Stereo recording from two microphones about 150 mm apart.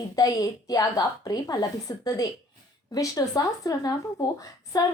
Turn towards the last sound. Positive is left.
turn(degrees=25)  # may be behind; listen again after turning